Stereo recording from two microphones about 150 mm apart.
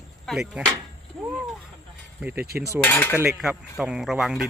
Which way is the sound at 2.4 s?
90° right.